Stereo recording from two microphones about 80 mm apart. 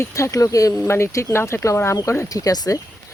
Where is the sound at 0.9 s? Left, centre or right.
Left.